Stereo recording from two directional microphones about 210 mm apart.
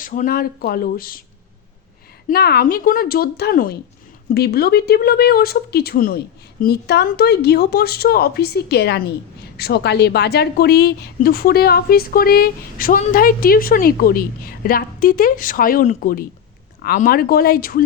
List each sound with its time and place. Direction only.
0.0 s a woman's voice: 40° left (ahead or behind)
2.3 s a woman's voice: 50° left (ahead or behind)